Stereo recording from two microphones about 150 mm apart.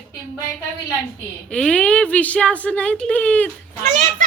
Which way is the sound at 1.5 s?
5° left (ahead or behind).